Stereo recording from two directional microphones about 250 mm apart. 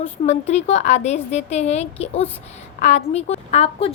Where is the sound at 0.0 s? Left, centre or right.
Left.